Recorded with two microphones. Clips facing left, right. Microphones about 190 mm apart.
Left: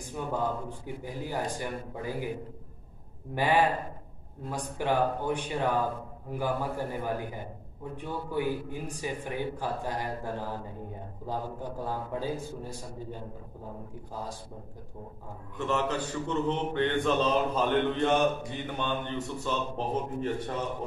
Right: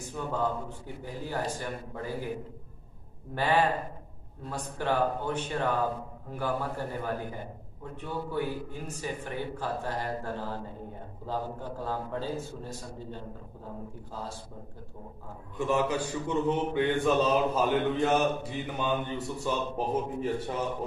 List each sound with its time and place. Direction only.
0.1 s a man's voice: 15° left (ahead or behind)
3.3 s a man's voice: 15° left (ahead or behind)
15.5 s a man's voice: 10° right (ahead or behind)